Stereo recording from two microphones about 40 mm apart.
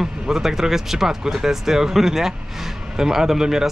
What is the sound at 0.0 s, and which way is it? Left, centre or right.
Speech, centre.